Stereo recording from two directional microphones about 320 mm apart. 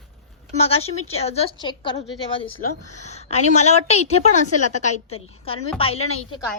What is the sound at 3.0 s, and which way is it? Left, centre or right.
A woman's voice, left.